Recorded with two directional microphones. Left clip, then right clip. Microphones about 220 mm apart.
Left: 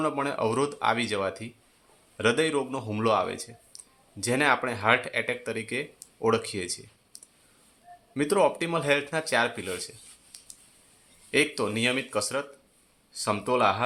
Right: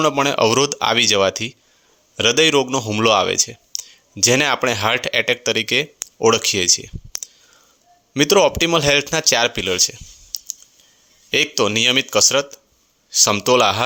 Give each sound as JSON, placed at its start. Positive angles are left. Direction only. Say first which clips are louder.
{"t": 0.0, "sound": "speech", "louder": "right 11 dB", "side_deg": -40}
{"t": 8.1, "sound": "speech", "louder": "right 9 dB", "side_deg": -40}
{"t": 11.3, "sound": "speech", "louder": "right 8 dB", "side_deg": -40}